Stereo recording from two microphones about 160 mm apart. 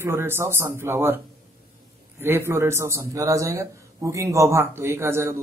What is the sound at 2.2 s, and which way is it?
A man's voice, 15° right (ahead or behind).